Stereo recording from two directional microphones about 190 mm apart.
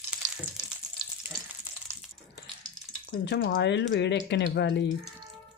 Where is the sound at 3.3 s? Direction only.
75° left (ahead or behind).